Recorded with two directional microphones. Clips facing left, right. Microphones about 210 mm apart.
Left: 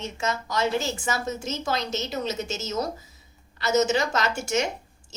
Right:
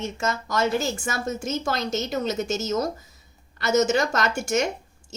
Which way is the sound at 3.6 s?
50° right (ahead or behind).